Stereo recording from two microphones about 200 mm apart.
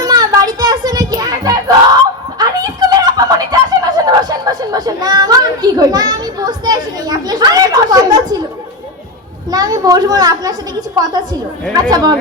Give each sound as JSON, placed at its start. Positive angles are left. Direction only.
{"t": 0.0, "sound": "child singing", "side_deg": -20}
{"t": 2.4, "sound": "a sound", "side_deg": -20}
{"t": 9.5, "sound": "a woman's voice", "side_deg": -20}